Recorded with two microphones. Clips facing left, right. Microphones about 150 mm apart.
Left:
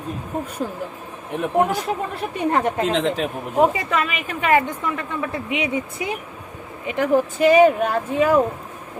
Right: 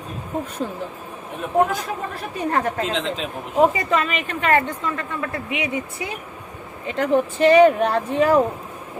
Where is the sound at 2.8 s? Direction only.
65° left (ahead or behind).